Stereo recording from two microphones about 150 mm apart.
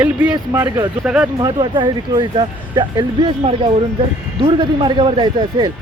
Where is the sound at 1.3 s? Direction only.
30° right (ahead or behind).